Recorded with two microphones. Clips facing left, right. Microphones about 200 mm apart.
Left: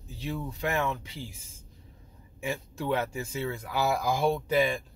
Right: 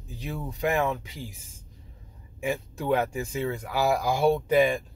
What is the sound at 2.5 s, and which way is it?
Speech, 15° right (ahead or behind).